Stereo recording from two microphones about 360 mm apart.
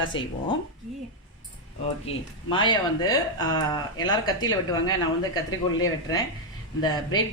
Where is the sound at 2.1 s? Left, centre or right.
Centre.